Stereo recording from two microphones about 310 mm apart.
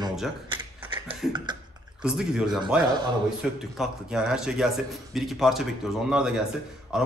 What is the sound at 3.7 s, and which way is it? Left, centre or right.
A man's voice, centre.